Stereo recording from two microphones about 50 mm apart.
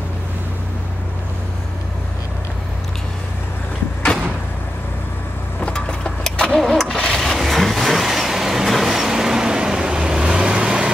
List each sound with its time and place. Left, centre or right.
5.6 s vehicle: left
6.5 s vehicle: centre